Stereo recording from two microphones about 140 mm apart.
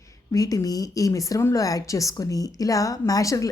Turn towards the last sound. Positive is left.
turn(degrees=25)  # may be behind; listen again after turning